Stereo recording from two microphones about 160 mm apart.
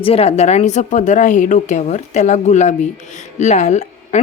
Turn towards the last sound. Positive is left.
turn(degrees=45)  # may be behind; listen again after turning